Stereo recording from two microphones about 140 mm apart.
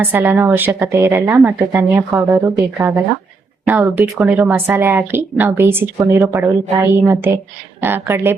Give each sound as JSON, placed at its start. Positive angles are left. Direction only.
{"t": 0.0, "sound": "a woman's voice", "side_deg": -15}